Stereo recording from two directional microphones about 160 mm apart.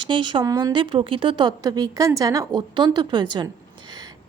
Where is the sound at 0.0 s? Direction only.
30° right (ahead or behind).